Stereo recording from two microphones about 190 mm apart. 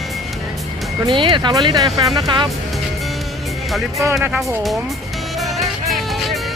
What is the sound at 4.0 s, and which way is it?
Speech, 15° right (ahead or behind).